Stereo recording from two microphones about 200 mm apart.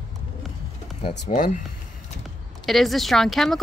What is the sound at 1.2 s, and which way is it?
Speech, 45° left (ahead or behind).